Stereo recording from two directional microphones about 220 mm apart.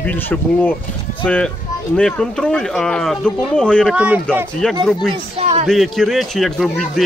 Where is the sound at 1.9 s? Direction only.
5° left (ahead or behind).